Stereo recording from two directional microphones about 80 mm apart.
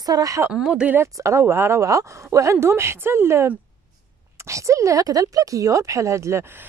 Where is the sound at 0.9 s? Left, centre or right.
Right.